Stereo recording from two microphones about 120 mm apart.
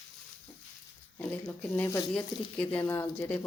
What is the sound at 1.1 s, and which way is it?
Speech, 15° left (ahead or behind).